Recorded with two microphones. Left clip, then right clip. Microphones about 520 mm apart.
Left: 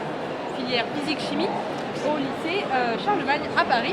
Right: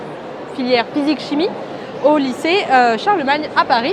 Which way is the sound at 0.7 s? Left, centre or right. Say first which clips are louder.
Right 11 dB; right.